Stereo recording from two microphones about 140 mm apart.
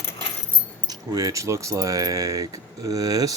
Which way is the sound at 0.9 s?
25° right (ahead or behind).